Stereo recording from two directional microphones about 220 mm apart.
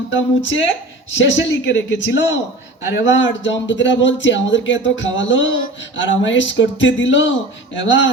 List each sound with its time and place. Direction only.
0.1 s speech: 60° left (ahead or behind)